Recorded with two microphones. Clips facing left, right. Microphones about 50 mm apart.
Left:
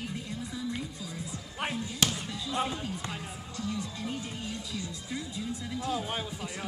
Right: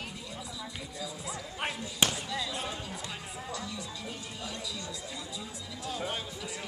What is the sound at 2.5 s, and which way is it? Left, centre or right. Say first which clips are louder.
Speech: left 5 dB; left.